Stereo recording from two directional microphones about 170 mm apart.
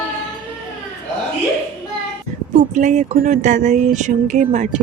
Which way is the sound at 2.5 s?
45° right (ahead or behind).